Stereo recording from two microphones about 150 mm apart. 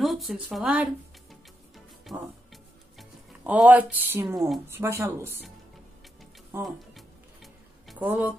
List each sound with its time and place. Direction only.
0.0 s speech: centre (ahead or behind)
2.0 s music: centre (ahead or behind); by 4.5 s 20° right (ahead or behind)
4.6 s speech: 15° right (ahead or behind)
6.6 s music: centre (ahead or behind)
8.0 s speech: 10° right (ahead or behind)